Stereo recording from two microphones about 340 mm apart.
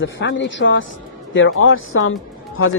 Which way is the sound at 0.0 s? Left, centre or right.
Left.